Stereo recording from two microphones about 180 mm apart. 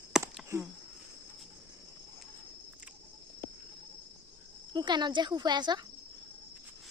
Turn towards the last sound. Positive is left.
turn(degrees=-25)  # may be behind; listen again after turning